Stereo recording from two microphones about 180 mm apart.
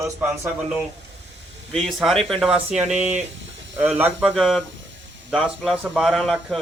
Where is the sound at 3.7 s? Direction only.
10° right (ahead or behind).